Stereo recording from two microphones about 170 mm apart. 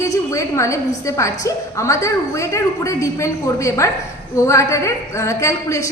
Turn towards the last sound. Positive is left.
turn(degrees=15)  # may be behind; listen again after turning